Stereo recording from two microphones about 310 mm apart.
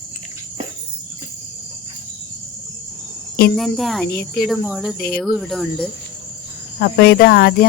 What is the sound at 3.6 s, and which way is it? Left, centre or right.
Speech, centre.